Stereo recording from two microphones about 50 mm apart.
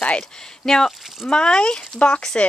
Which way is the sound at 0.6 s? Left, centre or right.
Centre.